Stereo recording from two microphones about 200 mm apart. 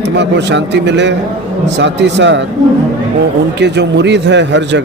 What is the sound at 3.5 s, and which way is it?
Speech, 60° right (ahead or behind).